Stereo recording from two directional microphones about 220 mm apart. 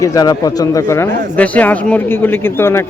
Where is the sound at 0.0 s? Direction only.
15° left (ahead or behind).